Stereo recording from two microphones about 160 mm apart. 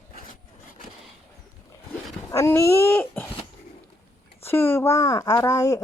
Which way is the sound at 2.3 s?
20° left (ahead or behind).